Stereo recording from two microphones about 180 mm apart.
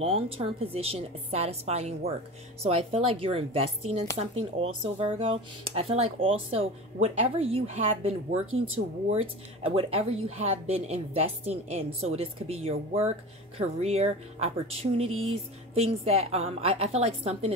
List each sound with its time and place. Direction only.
0.0 s speech: 30° right (ahead or behind)